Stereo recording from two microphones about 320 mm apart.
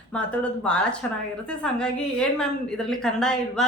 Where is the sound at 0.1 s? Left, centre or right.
Centre.